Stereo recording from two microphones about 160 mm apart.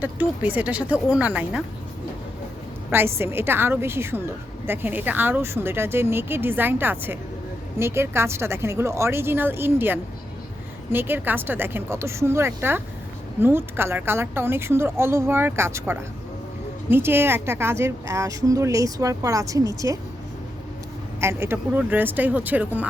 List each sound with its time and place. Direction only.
0.0 s speech: 10° right (ahead or behind)
2.9 s speech: 15° right (ahead or behind)
21.2 s speech: 15° right (ahead or behind)